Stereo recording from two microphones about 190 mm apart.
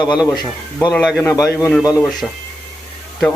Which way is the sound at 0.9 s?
5° left (ahead or behind).